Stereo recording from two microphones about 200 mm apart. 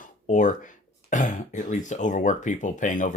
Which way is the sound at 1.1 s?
40° left (ahead or behind).